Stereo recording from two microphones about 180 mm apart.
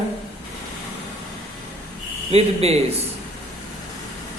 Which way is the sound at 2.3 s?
35° right (ahead or behind).